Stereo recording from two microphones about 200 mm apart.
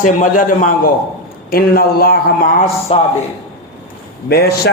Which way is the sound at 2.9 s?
30° left (ahead or behind).